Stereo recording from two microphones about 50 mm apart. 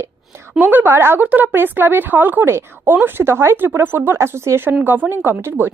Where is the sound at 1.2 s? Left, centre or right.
Right.